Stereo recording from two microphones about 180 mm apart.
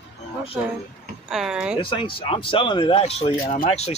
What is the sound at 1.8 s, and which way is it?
Speech, 30° left (ahead or behind).